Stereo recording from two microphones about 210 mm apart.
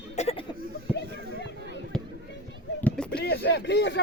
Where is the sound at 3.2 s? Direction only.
50° left (ahead or behind).